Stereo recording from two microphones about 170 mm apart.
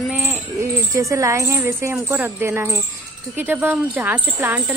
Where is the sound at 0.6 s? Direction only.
15° right (ahead or behind).